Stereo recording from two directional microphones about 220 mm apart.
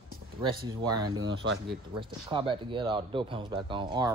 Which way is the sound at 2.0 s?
20° right (ahead or behind).